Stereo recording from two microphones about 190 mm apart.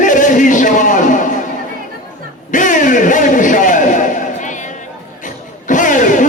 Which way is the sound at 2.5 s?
45° left (ahead or behind).